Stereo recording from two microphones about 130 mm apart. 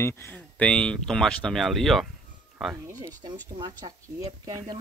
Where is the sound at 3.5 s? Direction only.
30° right (ahead or behind).